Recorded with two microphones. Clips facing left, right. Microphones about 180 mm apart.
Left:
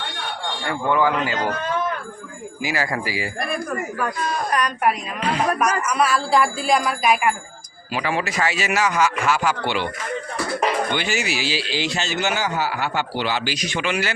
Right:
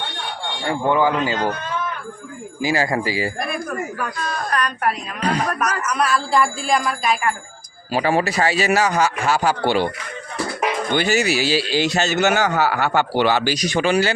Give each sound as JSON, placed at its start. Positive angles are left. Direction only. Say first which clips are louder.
{"t": 0.7, "sound": "a man's voice", "louder": "right 2 dB", "side_deg": -25}
{"t": 2.6, "sound": "a man's voice", "louder": "right 5 dB", "side_deg": -30}
{"t": 4.5, "sound": "speech", "louder": "left 1 dB", "side_deg": 10}
{"t": 7.9, "sound": "speech", "louder": "right 5 dB", "side_deg": -35}
{"t": 10.9, "sound": "a man's voice", "louder": "right 6 dB", "side_deg": -40}